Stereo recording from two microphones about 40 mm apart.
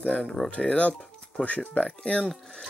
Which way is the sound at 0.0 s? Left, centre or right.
Left.